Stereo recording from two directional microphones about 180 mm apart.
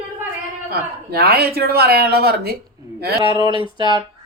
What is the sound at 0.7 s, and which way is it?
Speech, 60° right (ahead or behind).